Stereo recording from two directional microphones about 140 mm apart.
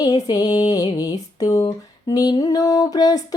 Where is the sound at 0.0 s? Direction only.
30° left (ahead or behind).